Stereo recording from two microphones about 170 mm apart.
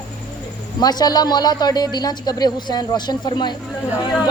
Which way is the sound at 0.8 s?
25° left (ahead or behind).